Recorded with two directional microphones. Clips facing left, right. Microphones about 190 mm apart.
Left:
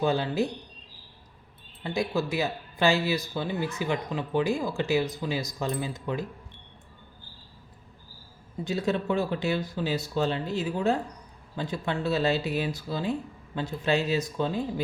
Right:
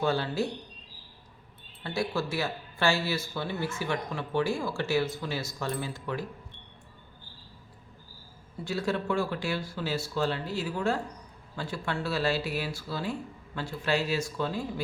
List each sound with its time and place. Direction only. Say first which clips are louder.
0.0 s speech: left 2 dB; 15° left (ahead or behind)
1.8 s speech: left 3 dB; 15° left (ahead or behind)
8.6 s speech: left 2 dB; 20° left (ahead or behind)